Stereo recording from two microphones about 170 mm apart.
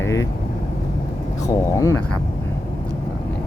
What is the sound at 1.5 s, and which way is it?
Speech, 20° left (ahead or behind).